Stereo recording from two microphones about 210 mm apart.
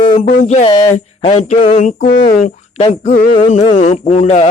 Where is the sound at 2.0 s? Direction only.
45° left (ahead or behind).